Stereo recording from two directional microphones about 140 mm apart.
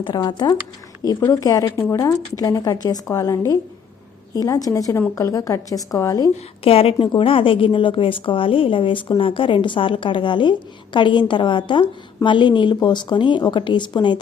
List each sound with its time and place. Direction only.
0.0 s a woman's voice: 30° left (ahead or behind)
6.3 s a woman's voice: 45° left (ahead or behind)